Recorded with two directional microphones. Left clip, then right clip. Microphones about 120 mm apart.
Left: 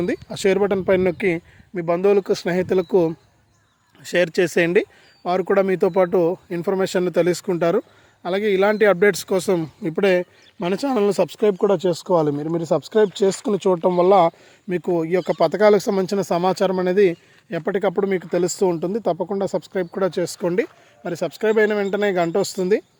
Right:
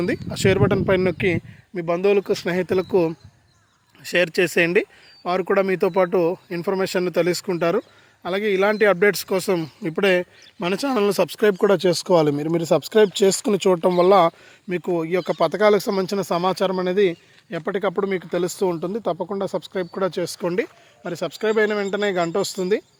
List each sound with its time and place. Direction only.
0.0 s speech: 5° left (ahead or behind)
11.6 s speech: 10° right (ahead or behind); by 14.3 s 5° left (ahead or behind)
14.7 s speech: 25° left (ahead or behind)
15.4 s speech: 35° left (ahead or behind)